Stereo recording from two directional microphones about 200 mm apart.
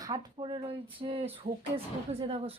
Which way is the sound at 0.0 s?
20° right (ahead or behind).